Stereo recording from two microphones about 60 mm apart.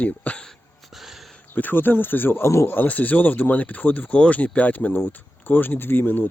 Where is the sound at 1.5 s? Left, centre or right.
Left.